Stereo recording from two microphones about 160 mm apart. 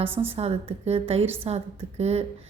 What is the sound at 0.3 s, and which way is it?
A woman's voice, 40° right (ahead or behind).